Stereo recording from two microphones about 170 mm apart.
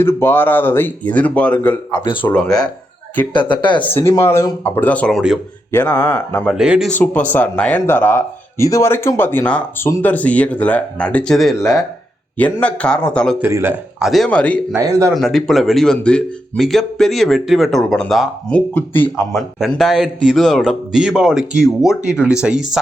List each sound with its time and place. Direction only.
0.0 s speech: 15° left (ahead or behind)
3.3 s speech: 25° left (ahead or behind)
3.8 s speech: 15° left (ahead or behind)
6.5 s speech: 5° right (ahead or behind)
6.9 s speech: 10° left (ahead or behind)
13.4 s speech: 15° right (ahead or behind)
14.0 s speech: centre (ahead or behind)
14.8 s speech: 20° right (ahead or behind)
15.1 s speech: centre (ahead or behind)